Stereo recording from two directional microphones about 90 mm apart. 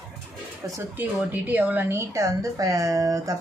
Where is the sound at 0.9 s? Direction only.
20° right (ahead or behind).